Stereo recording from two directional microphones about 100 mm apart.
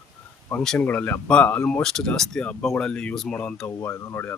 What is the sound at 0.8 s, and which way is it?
Speech, 15° left (ahead or behind).